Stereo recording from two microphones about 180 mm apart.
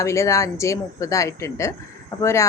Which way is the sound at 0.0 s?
15° left (ahead or behind).